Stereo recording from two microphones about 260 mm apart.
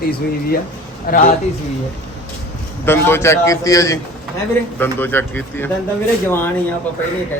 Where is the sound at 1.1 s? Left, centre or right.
Left.